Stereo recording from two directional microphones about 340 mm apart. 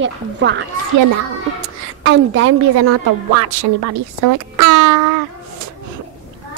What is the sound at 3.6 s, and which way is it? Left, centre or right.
Speech, right.